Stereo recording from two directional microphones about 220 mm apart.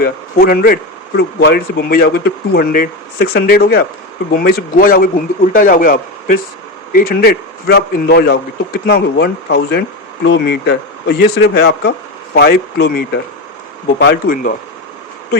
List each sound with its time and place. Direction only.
0.0 s a man's voice: 45° left (ahead or behind)